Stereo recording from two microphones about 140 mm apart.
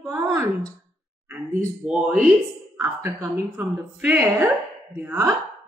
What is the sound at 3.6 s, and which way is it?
Speech, 5° right (ahead or behind).